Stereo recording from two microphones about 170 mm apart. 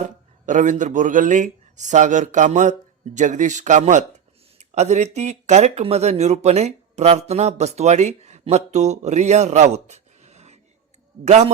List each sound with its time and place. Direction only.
0.0 s a man's voice: 45° right (ahead or behind)